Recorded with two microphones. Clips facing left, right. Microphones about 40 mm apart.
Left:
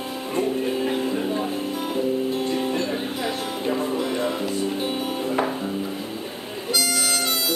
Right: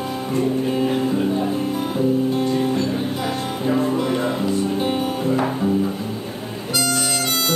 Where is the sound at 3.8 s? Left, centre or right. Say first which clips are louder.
Right 4 dB; right.